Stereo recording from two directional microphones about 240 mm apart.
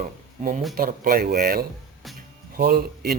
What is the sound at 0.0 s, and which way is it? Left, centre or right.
Speech, right.